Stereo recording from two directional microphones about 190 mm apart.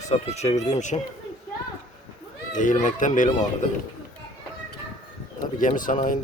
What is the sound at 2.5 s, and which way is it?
Speech, 40° left (ahead or behind).